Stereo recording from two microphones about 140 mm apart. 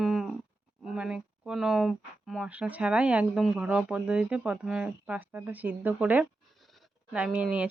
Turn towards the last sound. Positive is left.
turn(degrees=-10)  # may be behind; listen again after turning